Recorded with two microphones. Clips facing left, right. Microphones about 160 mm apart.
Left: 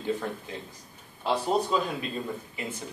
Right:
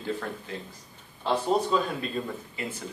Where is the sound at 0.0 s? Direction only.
15° left (ahead or behind).